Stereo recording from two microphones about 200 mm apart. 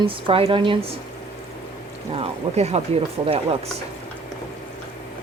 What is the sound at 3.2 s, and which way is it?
Speech, 20° right (ahead or behind).